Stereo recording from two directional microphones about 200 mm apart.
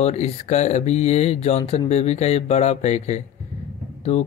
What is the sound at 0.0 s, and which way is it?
Speech, 35° left (ahead or behind).